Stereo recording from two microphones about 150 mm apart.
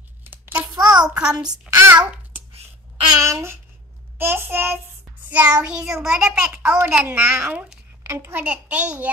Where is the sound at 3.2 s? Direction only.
20° right (ahead or behind).